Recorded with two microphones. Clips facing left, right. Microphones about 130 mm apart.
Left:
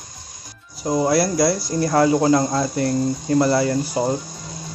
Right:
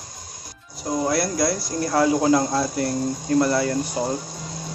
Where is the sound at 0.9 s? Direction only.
5° left (ahead or behind).